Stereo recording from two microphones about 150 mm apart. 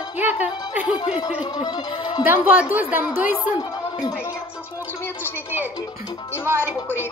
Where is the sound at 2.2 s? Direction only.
10° right (ahead or behind).